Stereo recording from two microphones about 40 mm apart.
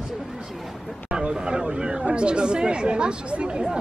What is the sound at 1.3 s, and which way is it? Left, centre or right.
Speech, centre.